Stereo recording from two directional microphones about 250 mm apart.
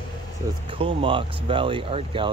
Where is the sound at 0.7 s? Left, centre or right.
Right.